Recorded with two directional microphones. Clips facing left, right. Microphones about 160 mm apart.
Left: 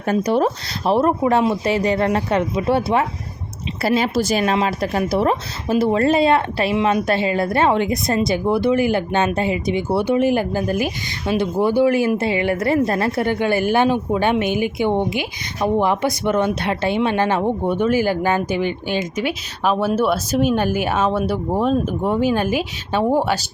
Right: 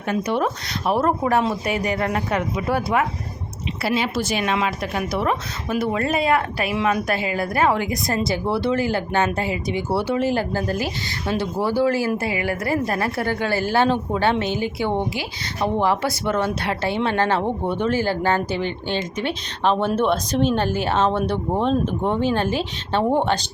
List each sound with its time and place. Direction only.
0.1 s speech: 35° left (ahead or behind)
0.9 s speech: 20° left (ahead or behind)
3.8 s speech: 40° left (ahead or behind); by 23.5 s 10° left (ahead or behind)